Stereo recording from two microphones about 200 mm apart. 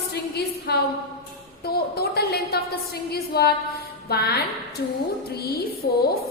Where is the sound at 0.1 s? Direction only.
55° left (ahead or behind).